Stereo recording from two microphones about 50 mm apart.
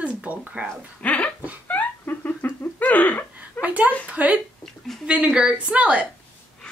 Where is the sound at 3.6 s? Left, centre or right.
Right.